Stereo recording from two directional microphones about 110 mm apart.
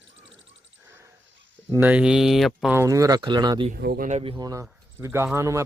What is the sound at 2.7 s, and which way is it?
Speech, 30° right (ahead or behind).